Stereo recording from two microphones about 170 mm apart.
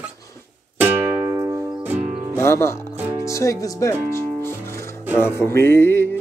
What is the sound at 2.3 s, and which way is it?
Speech, 15° left (ahead or behind).